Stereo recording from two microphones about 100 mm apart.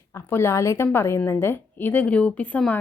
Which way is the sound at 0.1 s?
25° left (ahead or behind).